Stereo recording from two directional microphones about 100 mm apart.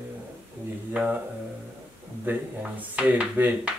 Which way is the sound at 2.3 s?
20° right (ahead or behind).